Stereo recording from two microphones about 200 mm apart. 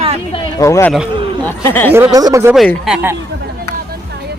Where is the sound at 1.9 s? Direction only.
10° right (ahead or behind).